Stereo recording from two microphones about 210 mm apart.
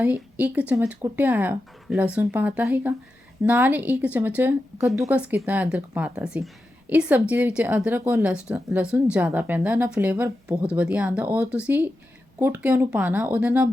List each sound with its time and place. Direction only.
0.0 s a woman's voice: 5° right (ahead or behind)